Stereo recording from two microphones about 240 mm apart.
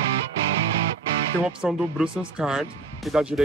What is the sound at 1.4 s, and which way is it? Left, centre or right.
Speech, centre.